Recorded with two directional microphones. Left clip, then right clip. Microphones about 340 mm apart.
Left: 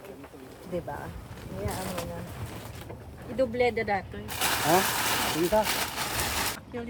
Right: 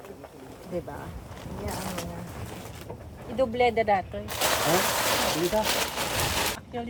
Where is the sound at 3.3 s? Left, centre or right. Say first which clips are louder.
Right 2 dB; centre.